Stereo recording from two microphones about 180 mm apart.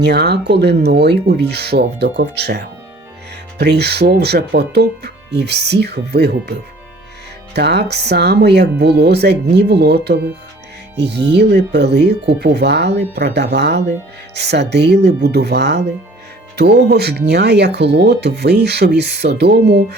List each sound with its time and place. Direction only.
0.0 s speech: 65° right (ahead or behind)
7.5 s speech: 70° right (ahead or behind)